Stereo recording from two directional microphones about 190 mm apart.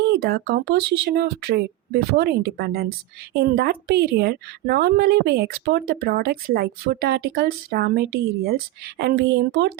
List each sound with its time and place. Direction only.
0.1 s a woman's voice: 55° right (ahead or behind)